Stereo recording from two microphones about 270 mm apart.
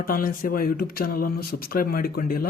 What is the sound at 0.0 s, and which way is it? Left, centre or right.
Speech, left.